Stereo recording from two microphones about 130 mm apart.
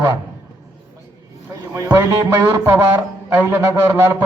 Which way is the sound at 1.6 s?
20° right (ahead or behind).